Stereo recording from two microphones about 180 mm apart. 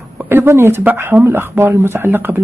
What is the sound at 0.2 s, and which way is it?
Speech, 10° right (ahead or behind).